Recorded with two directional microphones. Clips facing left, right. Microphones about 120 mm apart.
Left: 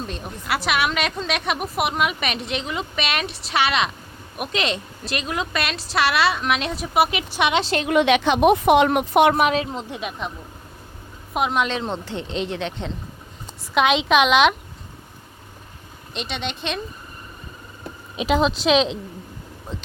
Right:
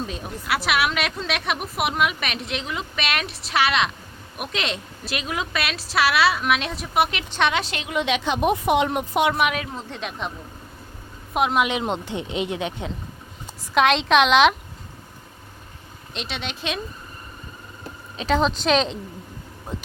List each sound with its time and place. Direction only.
0.0 s a woman's voice: centre (ahead or behind)
7.5 s a woman's voice: 30° left (ahead or behind)
7.8 s a woman's voice: 60° left (ahead or behind)
9.3 s a woman's voice: 35° left (ahead or behind)
10.0 s a woman's voice: centre (ahead or behind)
11.3 s a woman's voice: centre (ahead or behind)
11.7 s speech: 15° right (ahead or behind)
13.7 s a woman's voice: centre (ahead or behind)
16.1 s a woman's voice: centre (ahead or behind)
18.2 s a woman's voice: 5° left (ahead or behind)